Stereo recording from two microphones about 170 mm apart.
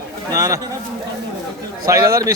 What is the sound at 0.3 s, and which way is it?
Speech, 20° right (ahead or behind).